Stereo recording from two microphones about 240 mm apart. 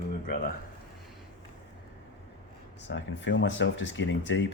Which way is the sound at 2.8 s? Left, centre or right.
Left.